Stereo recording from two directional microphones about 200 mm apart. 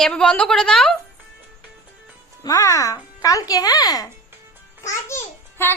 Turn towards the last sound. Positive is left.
turn(degrees=10)  # may be behind; listen again after turning